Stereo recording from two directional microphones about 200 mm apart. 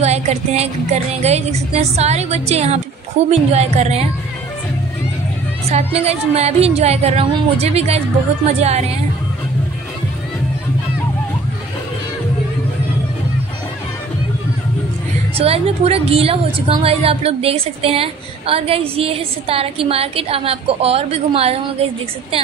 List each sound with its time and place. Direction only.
0.0 s a woman's voice: 35° right (ahead or behind)
5.7 s a woman's voice: 30° right (ahead or behind)
15.3 s a woman's voice: 30° right (ahead or behind)